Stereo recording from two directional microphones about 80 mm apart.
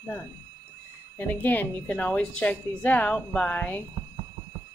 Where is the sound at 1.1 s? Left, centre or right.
Left.